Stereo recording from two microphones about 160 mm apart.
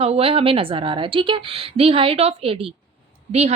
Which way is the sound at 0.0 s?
35° right (ahead or behind).